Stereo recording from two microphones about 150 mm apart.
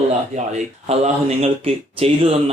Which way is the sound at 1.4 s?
40° right (ahead or behind).